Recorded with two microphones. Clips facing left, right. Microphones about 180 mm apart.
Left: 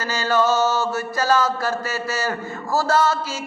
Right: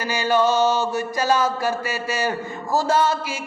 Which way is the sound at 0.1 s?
15° right (ahead or behind).